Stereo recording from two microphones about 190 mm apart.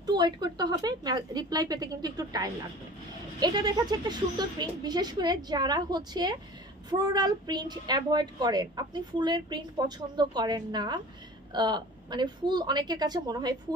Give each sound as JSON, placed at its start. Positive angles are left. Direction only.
{"t": 0.0, "sound": "a woman's voice", "side_deg": -20}